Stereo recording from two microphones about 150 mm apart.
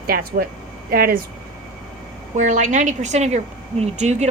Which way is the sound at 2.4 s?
55° right (ahead or behind).